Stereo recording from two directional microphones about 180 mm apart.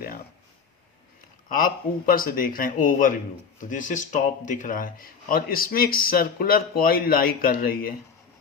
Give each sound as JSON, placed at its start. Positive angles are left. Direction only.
{"t": 1.5, "sound": "speech", "side_deg": 50}